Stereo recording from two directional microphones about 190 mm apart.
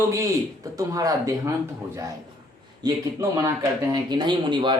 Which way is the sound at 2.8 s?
15° right (ahead or behind).